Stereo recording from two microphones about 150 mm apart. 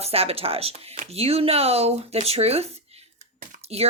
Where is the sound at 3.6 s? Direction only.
45° right (ahead or behind).